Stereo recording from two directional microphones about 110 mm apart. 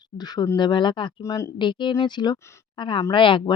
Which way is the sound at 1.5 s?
45° left (ahead or behind).